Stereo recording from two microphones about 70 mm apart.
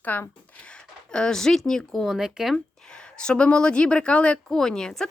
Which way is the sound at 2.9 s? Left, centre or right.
Centre.